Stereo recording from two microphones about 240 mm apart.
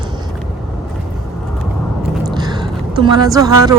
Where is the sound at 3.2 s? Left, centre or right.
Centre.